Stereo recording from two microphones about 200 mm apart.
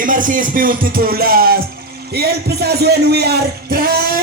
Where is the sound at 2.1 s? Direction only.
55° right (ahead or behind).